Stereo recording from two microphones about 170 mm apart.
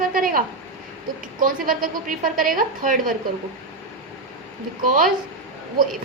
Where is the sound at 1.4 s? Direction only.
55° right (ahead or behind).